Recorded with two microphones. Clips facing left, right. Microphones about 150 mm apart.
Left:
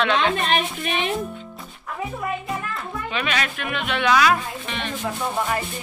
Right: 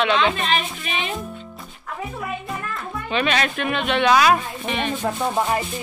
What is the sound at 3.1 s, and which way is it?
Speech, 30° right (ahead or behind).